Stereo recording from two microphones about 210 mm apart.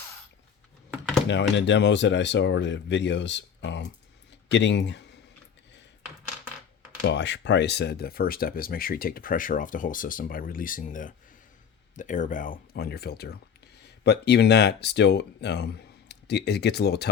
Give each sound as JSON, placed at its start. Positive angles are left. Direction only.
{"t": 1.3, "sound": "speech", "side_deg": 60}
{"t": 7.0, "sound": "speech", "side_deg": 55}